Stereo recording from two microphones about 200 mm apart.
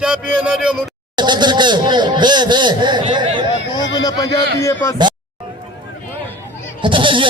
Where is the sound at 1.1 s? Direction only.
20° right (ahead or behind).